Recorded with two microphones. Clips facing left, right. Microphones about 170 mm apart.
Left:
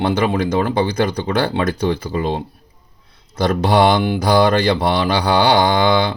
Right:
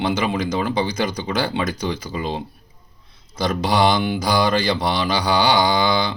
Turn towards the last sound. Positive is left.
turn(degrees=60)  # may be behind; listen again after turning